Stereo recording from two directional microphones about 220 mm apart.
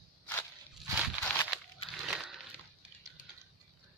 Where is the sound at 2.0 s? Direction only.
Centre (ahead or behind).